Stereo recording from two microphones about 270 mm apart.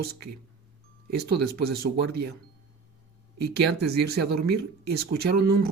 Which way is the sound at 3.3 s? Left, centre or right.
Right.